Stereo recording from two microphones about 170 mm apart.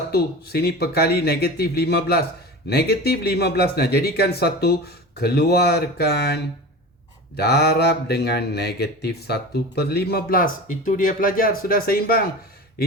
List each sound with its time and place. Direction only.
0.1 s speech: 70° left (ahead or behind)